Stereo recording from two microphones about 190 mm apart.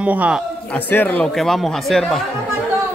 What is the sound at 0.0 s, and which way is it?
Speech, 5° right (ahead or behind).